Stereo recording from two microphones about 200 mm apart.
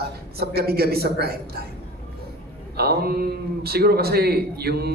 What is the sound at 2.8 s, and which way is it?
A woman's voice, 50° right (ahead or behind).